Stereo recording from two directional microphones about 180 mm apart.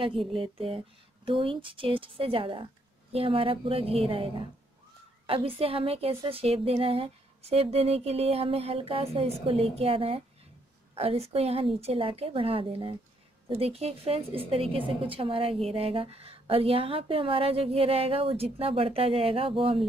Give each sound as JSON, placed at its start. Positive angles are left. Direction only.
{"t": 0.3, "sound": "a woman's voice", "side_deg": -30}